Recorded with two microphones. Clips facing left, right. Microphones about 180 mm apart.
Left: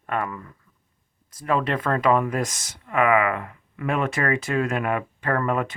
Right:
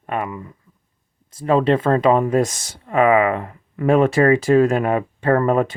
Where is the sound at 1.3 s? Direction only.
30° right (ahead or behind).